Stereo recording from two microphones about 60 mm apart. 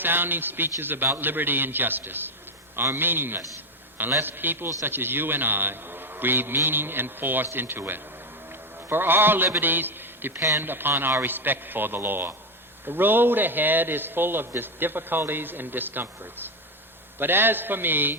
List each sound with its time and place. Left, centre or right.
0.0 s a man's voice: right